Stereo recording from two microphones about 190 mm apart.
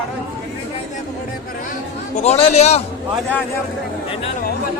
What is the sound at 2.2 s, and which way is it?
Speech, 35° left (ahead or behind).